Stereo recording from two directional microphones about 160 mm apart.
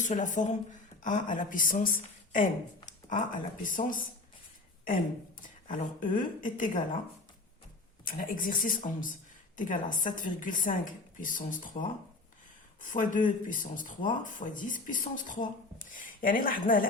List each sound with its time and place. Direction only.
0.0 s speech: 50° left (ahead or behind)
5.4 s a woman's voice: 55° left (ahead or behind)
8.0 s speech: 60° left (ahead or behind)
12.8 s speech: 55° left (ahead or behind)